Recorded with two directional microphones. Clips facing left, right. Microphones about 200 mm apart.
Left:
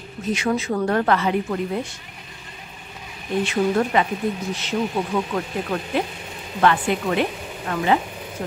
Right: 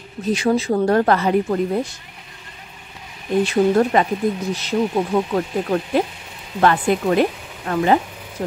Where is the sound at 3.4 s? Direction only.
35° right (ahead or behind).